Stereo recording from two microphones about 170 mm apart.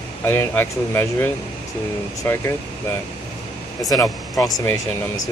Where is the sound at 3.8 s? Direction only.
20° left (ahead or behind).